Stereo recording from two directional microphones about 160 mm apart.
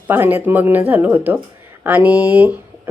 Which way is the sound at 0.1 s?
10° right (ahead or behind).